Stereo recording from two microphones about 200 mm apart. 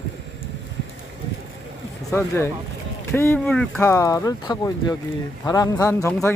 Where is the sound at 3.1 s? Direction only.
10° left (ahead or behind).